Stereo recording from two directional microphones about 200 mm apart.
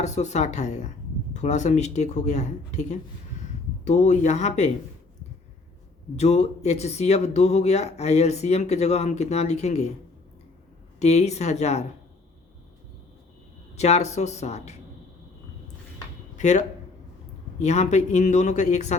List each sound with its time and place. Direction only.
0.0 s speech: 35° left (ahead or behind)
6.1 s speech: 35° left (ahead or behind)
11.0 s speech: 35° left (ahead or behind)
13.7 s speech: 35° left (ahead or behind)
16.4 s speech: 35° left (ahead or behind)